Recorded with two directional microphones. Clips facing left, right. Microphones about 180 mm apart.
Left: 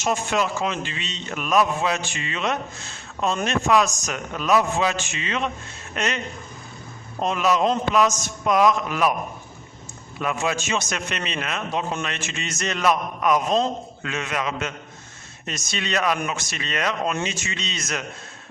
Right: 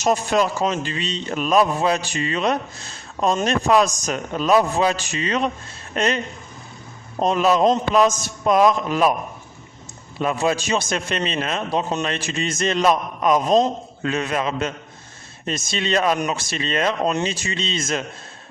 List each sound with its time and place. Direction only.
0.0 s a man's voice: 40° right (ahead or behind)
7.2 s a man's voice: 35° right (ahead or behind)
10.2 s a man's voice: 35° right (ahead or behind)